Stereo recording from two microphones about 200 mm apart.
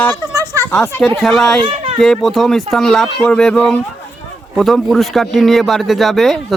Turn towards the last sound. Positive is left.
turn(degrees=0)  # may be behind; listen again after turning